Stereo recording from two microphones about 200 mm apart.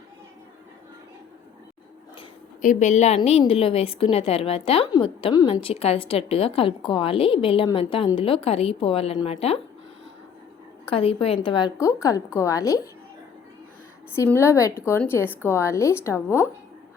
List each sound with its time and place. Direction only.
2.6 s a woman's voice: 40° left (ahead or behind)
10.8 s a woman's voice: 30° left (ahead or behind)
14.2 s a woman's voice: 15° left (ahead or behind)